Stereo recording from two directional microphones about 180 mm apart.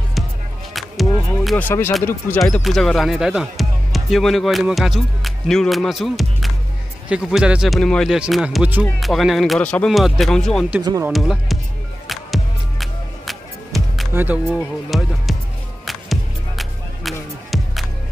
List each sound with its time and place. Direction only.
0.7 s music: centre (ahead or behind)
1.7 s speech: 10° left (ahead or behind)
2.6 s speech: centre (ahead or behind)
10.8 s speech: 20° right (ahead or behind)
11.1 s speech: centre (ahead or behind)
12.1 s music: centre (ahead or behind)
14.1 s speech: 10° right (ahead or behind)
14.6 s speech: centre (ahead or behind)
15.8 s music: centre (ahead or behind)